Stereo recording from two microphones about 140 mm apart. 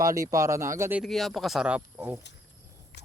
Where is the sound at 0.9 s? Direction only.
Centre (ahead or behind).